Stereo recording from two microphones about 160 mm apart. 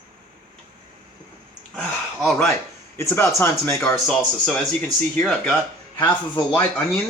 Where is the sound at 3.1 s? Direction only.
15° left (ahead or behind).